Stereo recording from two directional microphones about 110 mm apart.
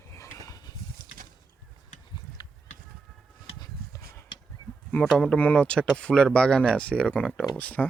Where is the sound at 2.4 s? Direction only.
35° left (ahead or behind).